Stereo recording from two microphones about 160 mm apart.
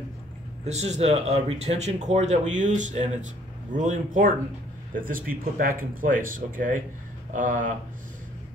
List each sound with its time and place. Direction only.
0.7 s speech: 45° right (ahead or behind)